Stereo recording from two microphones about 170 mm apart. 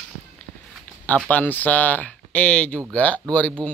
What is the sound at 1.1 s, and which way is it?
A man's voice, 10° left (ahead or behind).